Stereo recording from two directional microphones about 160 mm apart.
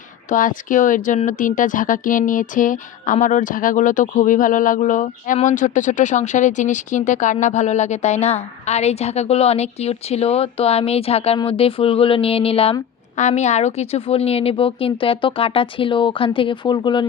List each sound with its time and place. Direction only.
0.3 s speech: 55° left (ahead or behind); by 12.7 s 35° left (ahead or behind)
13.1 s a woman's voice: 45° left (ahead or behind); by 17.1 s 30° left (ahead or behind)